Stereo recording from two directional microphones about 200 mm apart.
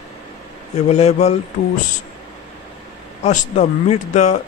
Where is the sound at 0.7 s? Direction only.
35° left (ahead or behind).